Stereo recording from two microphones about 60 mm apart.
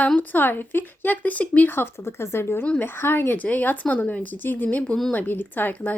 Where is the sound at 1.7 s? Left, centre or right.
Left.